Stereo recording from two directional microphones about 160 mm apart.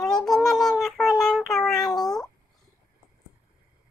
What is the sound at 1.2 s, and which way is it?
Child singing, centre (ahead or behind).